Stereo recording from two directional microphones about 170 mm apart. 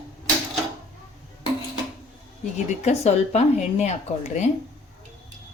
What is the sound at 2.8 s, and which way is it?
A woman's voice, 40° left (ahead or behind).